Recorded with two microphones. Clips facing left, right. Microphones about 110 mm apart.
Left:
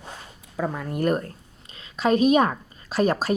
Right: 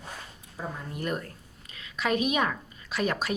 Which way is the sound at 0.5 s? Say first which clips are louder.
Left 9 dB; 85° left.